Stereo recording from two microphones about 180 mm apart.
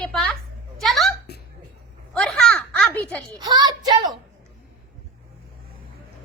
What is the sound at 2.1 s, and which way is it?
A child's voice, 5° left (ahead or behind).